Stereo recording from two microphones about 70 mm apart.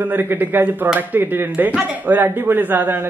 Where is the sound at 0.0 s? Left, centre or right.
Right.